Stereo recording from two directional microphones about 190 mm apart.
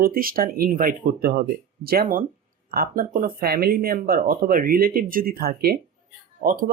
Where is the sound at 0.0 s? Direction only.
50° right (ahead or behind).